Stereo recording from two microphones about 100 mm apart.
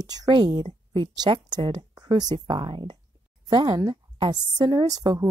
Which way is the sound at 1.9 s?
40° right (ahead or behind).